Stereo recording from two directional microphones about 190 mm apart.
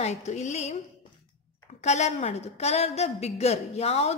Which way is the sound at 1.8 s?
35° left (ahead or behind).